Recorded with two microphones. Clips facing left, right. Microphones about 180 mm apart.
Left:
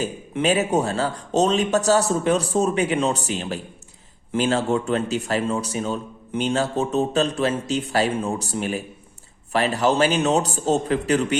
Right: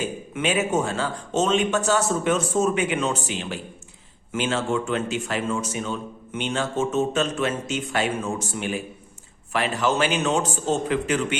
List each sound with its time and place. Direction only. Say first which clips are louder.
0.0 s speech: left 3 dB; 40° left (ahead or behind)